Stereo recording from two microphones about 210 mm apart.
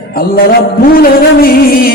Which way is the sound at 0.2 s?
45° left (ahead or behind).